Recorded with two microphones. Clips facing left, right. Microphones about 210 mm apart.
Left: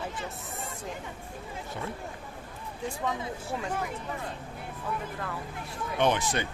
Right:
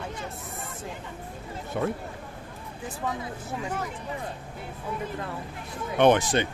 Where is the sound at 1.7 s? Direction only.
60° right (ahead or behind).